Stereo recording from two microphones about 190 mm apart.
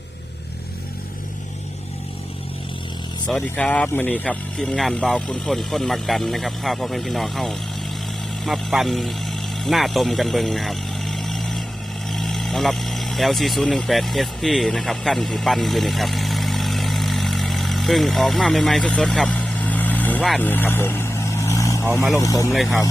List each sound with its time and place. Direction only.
3.2 s speech: 5° left (ahead or behind)
12.0 s vehicle: centre (ahead or behind); by 21.8 s 15° left (ahead or behind)
22.1 s speech: 15° left (ahead or behind)
22.5 s speech: centre (ahead or behind)